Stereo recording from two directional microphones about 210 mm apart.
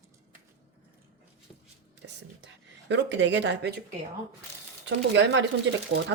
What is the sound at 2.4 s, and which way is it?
Speech, 60° right (ahead or behind).